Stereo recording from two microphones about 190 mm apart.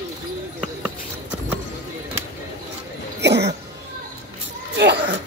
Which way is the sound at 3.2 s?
65° right (ahead or behind).